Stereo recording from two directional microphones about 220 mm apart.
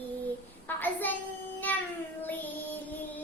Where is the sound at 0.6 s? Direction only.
10° left (ahead or behind).